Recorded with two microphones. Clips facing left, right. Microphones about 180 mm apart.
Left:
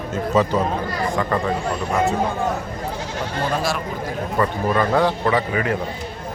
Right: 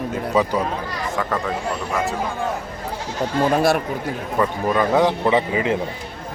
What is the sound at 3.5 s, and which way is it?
Speech, 55° right (ahead or behind).